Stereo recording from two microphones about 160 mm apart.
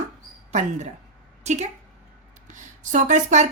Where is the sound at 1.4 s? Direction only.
45° right (ahead or behind).